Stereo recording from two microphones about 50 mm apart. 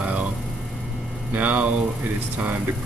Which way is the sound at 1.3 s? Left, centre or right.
Right.